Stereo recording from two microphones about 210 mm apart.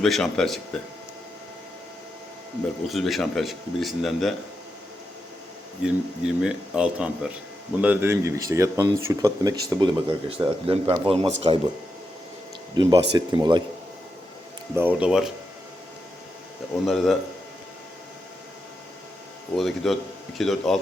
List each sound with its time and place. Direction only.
0.0 s speech: centre (ahead or behind)
2.9 s speech: centre (ahead or behind)
5.8 s speech: 5° right (ahead or behind); by 11.6 s 30° right (ahead or behind)
12.7 s speech: 20° right (ahead or behind)
14.8 s speech: 5° right (ahead or behind)
16.8 s speech: centre (ahead or behind)
19.5 s speech: centre (ahead or behind)